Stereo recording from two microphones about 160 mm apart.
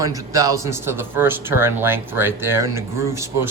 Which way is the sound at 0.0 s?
20° right (ahead or behind).